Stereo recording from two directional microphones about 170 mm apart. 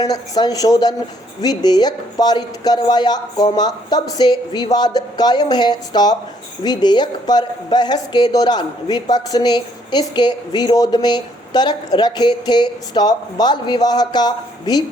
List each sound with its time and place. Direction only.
0.0 s a woman's voice: 25° left (ahead or behind)